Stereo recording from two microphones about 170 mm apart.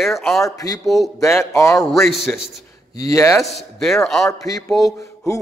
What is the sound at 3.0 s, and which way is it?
Speech, 15° left (ahead or behind).